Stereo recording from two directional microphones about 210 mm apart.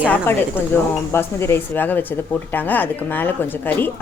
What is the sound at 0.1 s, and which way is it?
Speech, 10° left (ahead or behind).